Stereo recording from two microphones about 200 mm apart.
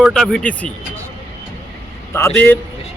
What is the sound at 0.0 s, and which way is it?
Speech, centre (ahead or behind).